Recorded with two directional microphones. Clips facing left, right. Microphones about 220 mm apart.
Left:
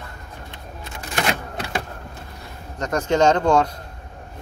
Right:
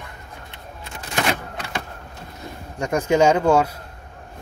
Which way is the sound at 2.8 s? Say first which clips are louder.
Right 1 dB; 10° right (ahead or behind).